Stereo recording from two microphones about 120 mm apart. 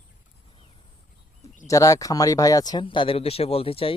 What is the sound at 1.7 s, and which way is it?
Speech, 25° left (ahead or behind).